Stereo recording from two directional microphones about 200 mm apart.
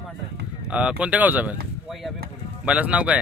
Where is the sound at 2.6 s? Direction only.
5° right (ahead or behind).